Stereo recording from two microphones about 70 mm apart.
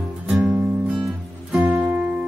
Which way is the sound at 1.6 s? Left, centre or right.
Centre.